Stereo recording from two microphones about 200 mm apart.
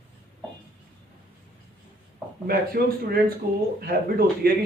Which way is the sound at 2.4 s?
50° right (ahead or behind).